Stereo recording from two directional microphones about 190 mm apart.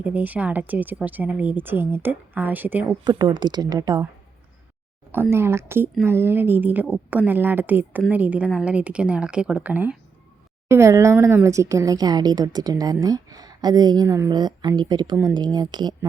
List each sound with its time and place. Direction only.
0.0 s speech: 10° right (ahead or behind)
3.0 s a woman's voice: 20° right (ahead or behind)
5.3 s a woman's voice: 15° right (ahead or behind)